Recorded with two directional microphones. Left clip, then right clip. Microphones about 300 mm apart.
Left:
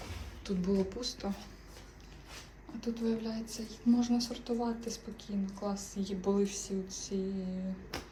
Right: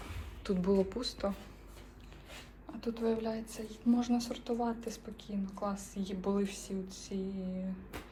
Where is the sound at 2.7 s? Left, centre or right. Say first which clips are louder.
Right 2 dB; centre.